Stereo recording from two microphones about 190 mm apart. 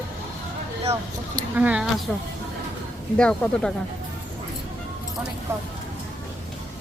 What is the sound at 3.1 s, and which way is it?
Speech, 5° left (ahead or behind).